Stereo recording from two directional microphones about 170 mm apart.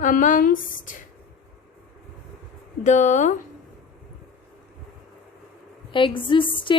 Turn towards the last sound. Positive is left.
turn(degrees=30)  # may be behind; listen again after turning